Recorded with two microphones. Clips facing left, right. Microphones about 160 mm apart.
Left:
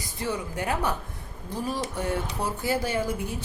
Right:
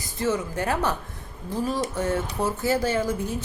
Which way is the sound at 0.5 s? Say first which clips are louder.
Right 2 dB; 15° left (ahead or behind).